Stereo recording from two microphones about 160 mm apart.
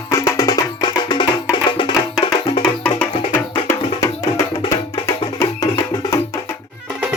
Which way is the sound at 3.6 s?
15° left (ahead or behind).